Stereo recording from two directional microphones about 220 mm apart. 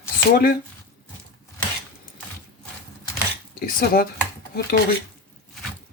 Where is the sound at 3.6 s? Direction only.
40° left (ahead or behind).